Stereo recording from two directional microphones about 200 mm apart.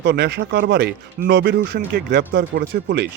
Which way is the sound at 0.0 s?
55° right (ahead or behind).